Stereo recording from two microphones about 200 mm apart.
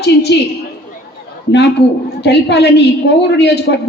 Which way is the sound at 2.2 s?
55° left (ahead or behind).